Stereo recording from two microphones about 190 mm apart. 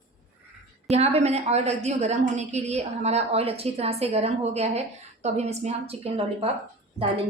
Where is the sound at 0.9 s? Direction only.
35° right (ahead or behind).